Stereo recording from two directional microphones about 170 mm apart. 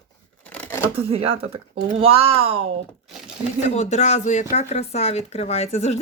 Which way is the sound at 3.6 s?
40° left (ahead or behind).